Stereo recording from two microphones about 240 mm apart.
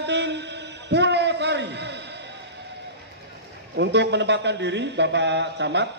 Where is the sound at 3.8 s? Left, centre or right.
Right.